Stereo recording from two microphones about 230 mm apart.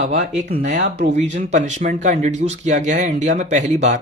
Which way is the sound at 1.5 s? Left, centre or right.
Right.